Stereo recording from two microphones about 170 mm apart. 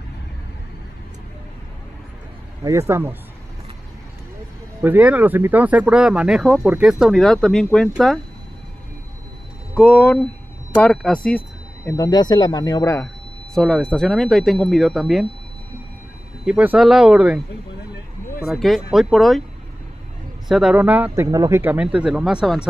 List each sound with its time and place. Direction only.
2.9 s speech: 10° right (ahead or behind)
4.8 s speech: 10° right (ahead or behind)
9.8 s speech: 10° left (ahead or behind)
11.2 s a sound: 10° left (ahead or behind)
11.9 s speech: 25° left (ahead or behind)
13.6 s speech: centre (ahead or behind)
16.4 s speech: 5° right (ahead or behind)
18.4 s speech: centre (ahead or behind)
20.4 s speech: 5° right (ahead or behind)